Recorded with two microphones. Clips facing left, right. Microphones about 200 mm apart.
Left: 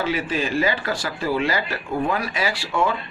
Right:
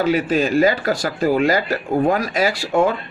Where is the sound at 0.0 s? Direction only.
45° right (ahead or behind).